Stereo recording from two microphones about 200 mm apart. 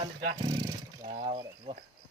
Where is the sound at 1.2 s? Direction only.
25° right (ahead or behind).